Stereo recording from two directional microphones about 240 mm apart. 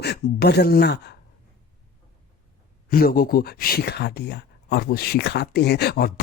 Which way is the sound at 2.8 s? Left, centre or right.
Left.